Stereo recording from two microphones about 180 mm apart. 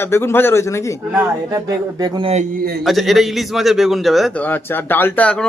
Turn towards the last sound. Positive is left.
turn(degrees=5)  # may be behind; listen again after turning